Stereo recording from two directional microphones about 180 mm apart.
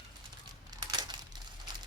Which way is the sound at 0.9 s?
25° right (ahead or behind).